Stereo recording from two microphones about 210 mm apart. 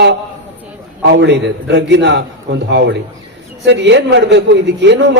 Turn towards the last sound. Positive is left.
turn(degrees=-55)  # may be behind; listen again after turning